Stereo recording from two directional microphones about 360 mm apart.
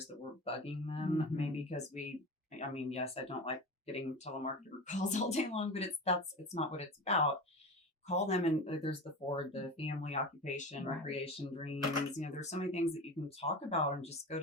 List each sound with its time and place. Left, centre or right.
0.4 s speech: centre